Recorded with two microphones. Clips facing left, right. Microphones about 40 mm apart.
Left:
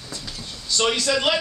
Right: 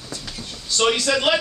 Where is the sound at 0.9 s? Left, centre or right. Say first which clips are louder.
Right 2 dB; centre.